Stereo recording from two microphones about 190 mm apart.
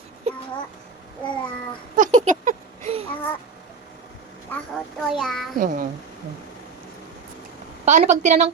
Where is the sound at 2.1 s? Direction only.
40° right (ahead or behind).